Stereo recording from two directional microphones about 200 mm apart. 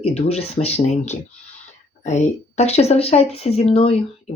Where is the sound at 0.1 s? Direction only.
35° left (ahead or behind).